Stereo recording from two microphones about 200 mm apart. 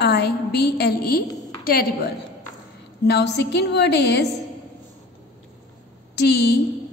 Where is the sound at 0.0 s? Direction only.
55° left (ahead or behind).